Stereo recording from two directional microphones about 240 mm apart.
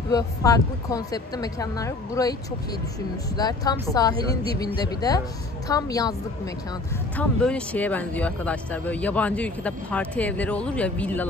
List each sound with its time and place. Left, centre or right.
0.1 s a woman's voice: centre